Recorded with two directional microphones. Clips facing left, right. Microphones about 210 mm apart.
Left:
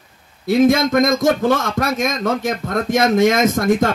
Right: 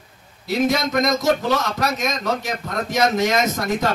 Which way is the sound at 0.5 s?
50° left (ahead or behind).